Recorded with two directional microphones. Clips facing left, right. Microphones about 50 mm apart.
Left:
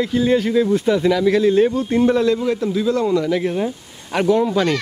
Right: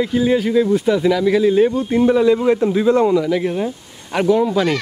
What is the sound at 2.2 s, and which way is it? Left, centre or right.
Speech, right.